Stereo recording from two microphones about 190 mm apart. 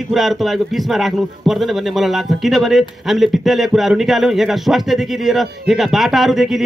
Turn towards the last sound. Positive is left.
turn(degrees=0)  # may be behind; listen again after turning